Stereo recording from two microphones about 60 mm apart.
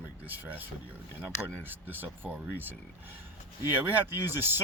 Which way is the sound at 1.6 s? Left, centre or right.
Right.